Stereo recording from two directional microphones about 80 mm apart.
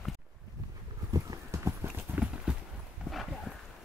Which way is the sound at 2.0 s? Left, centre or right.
Centre.